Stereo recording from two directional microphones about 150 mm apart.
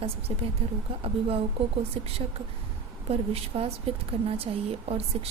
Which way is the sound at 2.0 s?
40° right (ahead or behind).